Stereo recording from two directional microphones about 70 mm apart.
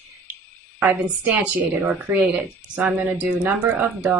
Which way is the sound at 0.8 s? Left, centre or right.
Right.